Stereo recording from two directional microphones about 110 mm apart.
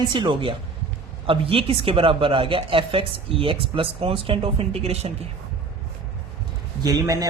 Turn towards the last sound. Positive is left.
turn(degrees=-35)  # may be behind; listen again after turning